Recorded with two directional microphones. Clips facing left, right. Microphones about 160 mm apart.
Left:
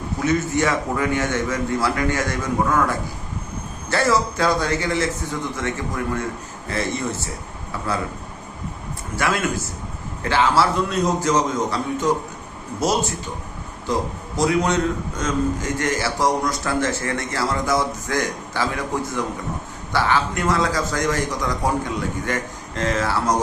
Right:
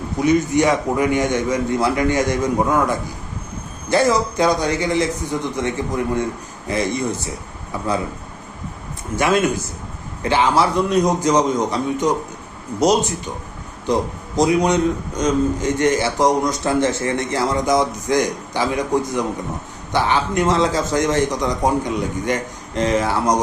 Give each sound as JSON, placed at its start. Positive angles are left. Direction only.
{"t": 0.2, "sound": "a man's voice", "side_deg": -15}
{"t": 9.1, "sound": "a man's voice", "side_deg": -20}